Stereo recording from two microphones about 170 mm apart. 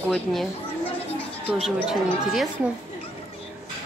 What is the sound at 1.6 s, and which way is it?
Speech, centre (ahead or behind).